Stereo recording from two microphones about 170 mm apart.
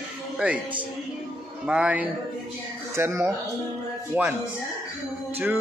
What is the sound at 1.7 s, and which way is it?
A man's voice, 5° right (ahead or behind).